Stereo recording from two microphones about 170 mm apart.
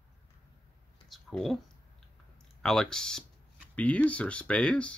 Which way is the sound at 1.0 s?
Centre (ahead or behind).